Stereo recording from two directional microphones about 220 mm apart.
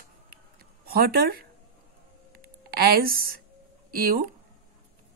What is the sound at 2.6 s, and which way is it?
Speech, 45° right (ahead or behind).